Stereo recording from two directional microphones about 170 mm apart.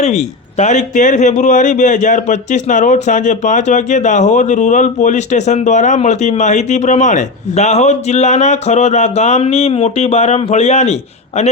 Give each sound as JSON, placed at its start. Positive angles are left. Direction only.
{"t": 0.6, "sound": "a man's voice", "side_deg": 45}